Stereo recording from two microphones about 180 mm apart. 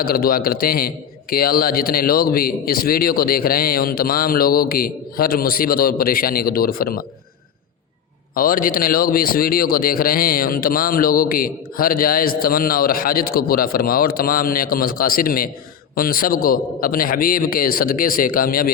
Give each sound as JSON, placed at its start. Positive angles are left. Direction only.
{"t": 0.0, "sound": "a man's voice", "side_deg": 55}
{"t": 8.4, "sound": "a man's voice", "side_deg": 50}